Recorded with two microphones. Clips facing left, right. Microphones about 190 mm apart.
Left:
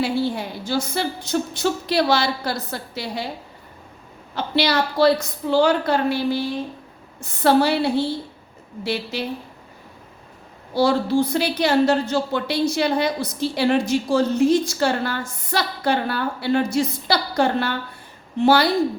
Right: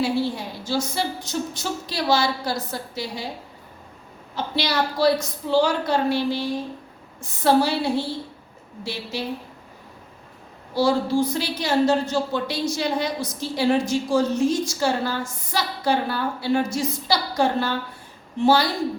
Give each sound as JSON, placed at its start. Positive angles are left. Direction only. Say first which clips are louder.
{"t": 0.0, "sound": "a woman's voice", "louder": "left 1 dB", "side_deg": 60}
{"t": 4.4, "sound": "a woman's voice", "louder": "left 3 dB", "side_deg": 65}
{"t": 8.8, "sound": "a woman's voice", "louder": "left 4 dB", "side_deg": 65}
{"t": 10.8, "sound": "a woman's voice", "louder": "left 2 dB", "side_deg": 60}